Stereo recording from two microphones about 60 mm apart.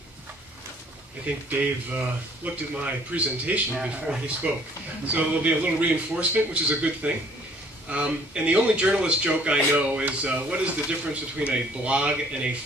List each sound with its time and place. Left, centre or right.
1.2 s speech: right
3.8 s speech: centre